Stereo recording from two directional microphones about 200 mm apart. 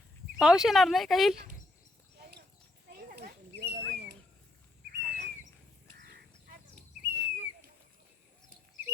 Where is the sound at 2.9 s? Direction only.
45° right (ahead or behind).